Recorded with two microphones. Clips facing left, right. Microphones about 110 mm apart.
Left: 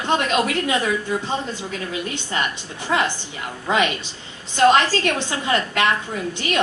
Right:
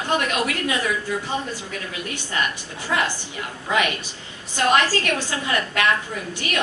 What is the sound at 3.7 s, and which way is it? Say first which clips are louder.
Speech: left 2 dB; 20° left (ahead or behind).